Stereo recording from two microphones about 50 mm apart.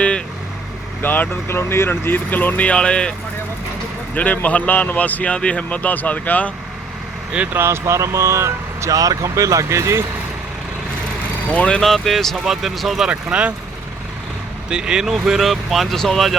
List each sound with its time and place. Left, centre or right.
1.0 s speech: left
1.5 s speech: left
2.3 s speech: left
2.7 s speech: centre
4.1 s speech: left
7.5 s speech: right
11.5 s speech: left
11.8 s speech: centre
13.1 s speech: right
14.7 s speech: centre
15.0 s speech: centre